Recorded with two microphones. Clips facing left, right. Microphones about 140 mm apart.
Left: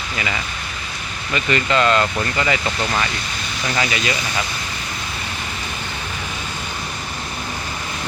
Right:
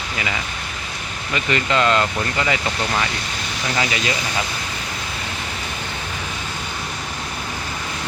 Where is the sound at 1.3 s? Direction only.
15° right (ahead or behind).